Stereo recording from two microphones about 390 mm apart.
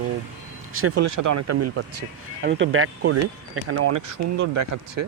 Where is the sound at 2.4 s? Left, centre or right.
Right.